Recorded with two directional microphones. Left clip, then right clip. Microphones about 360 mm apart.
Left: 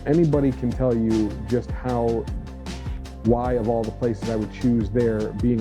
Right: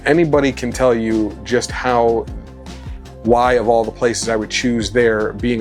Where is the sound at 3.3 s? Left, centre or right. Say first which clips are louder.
Right 14 dB; centre.